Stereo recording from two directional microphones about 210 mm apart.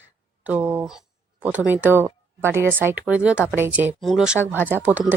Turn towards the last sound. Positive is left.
turn(degrees=-5)  # may be behind; listen again after turning